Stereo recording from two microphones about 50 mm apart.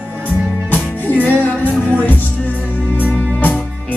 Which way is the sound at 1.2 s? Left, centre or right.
Left.